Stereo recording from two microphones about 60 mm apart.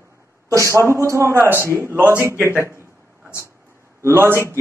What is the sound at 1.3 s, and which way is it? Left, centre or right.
Speech, right.